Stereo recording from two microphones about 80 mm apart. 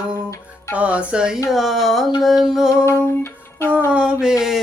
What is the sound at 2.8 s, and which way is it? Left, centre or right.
Music, left.